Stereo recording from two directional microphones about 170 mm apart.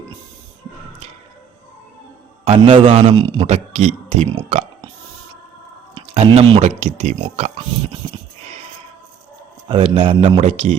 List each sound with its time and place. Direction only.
2.4 s a man's voice: 35° right (ahead or behind)
5.9 s speech: 35° right (ahead or behind)
9.6 s a man's voice: 30° right (ahead or behind)